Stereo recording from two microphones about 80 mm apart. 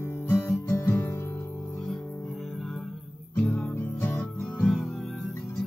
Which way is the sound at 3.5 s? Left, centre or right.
Left.